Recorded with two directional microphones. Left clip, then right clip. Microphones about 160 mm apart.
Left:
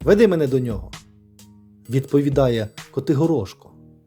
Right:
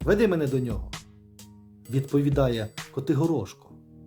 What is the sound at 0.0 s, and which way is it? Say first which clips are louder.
Speech: left 7 dB; 35° left (ahead or behind).